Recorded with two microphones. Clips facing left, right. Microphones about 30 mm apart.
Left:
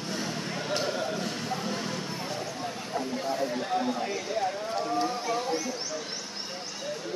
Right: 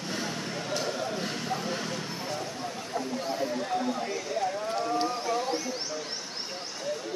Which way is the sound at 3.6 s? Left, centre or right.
Centre.